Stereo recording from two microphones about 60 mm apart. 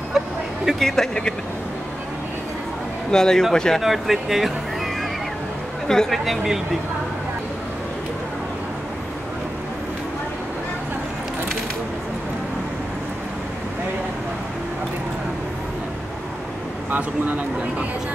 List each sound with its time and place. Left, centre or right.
0.2 s vehicle: centre
0.7 s speech: centre
3.1 s speech: centre
3.8 s speech: centre
5.9 s speech: centre
16.9 s speech: right